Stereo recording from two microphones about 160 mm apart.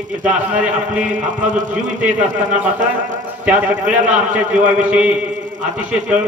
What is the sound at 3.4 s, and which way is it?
A man's voice, 10° right (ahead or behind).